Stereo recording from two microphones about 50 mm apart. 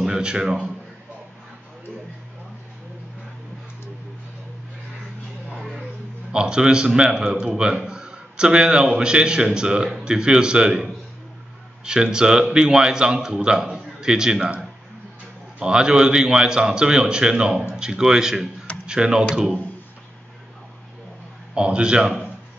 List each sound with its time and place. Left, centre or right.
0.0 s a man's voice: centre
5.6 s a sound: centre
6.3 s a man's voice: centre
15.6 s a man's voice: centre
21.5 s a man's voice: right